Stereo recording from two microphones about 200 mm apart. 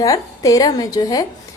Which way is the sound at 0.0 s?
15° left (ahead or behind).